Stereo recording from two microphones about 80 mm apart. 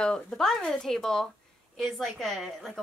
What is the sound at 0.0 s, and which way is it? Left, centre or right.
A woman's voice, centre.